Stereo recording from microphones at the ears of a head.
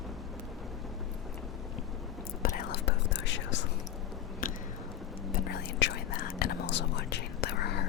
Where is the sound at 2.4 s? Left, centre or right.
Left.